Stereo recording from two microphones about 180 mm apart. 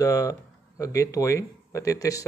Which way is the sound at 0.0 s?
20° left (ahead or behind).